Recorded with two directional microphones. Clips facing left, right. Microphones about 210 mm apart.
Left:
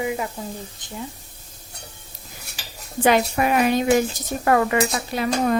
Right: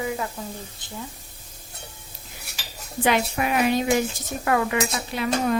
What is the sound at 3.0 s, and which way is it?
A woman's voice, 45° left (ahead or behind).